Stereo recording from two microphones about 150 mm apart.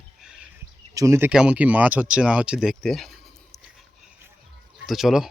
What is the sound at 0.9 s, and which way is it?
Speech, 20° right (ahead or behind).